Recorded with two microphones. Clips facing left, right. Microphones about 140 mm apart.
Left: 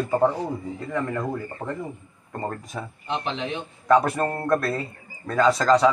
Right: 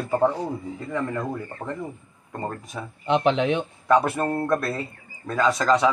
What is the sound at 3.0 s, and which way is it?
Speech, 65° right (ahead or behind).